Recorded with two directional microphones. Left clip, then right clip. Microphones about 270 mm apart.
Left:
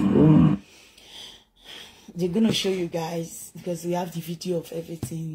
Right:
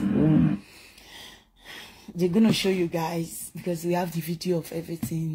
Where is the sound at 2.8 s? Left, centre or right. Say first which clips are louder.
Right 1 dB; right.